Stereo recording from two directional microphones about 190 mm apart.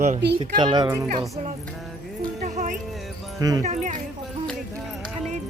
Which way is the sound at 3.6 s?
40° right (ahead or behind).